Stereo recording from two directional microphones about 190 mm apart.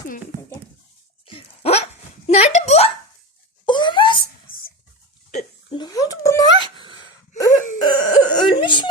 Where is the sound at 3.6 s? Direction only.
25° left (ahead or behind).